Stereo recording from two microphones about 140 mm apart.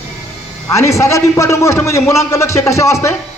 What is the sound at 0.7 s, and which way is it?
A man's voice, 20° left (ahead or behind).